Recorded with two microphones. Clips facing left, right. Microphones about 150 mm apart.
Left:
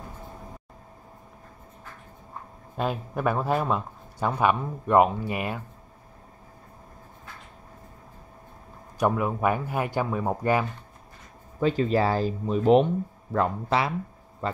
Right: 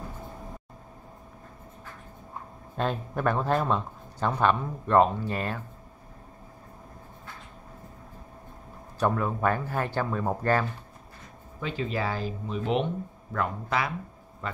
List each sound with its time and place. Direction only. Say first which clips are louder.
2.8 s speech: left 1 dB; 5° left (ahead or behind)
9.0 s speech: left 2 dB; 15° left (ahead or behind)
11.6 s speech: left 8 dB; 40° left (ahead or behind)
13.3 s speech: left 5 dB; 30° left (ahead or behind)